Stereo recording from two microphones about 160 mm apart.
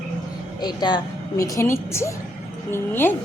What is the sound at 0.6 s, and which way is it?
A woman's voice, 25° left (ahead or behind).